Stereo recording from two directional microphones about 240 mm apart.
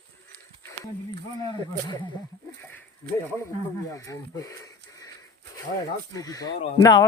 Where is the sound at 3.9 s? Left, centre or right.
Centre.